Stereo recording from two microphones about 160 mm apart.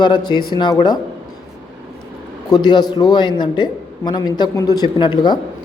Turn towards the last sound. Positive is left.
turn(degrees=30)  # may be behind; listen again after turning